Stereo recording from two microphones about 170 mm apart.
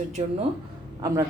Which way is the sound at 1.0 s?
20° right (ahead or behind).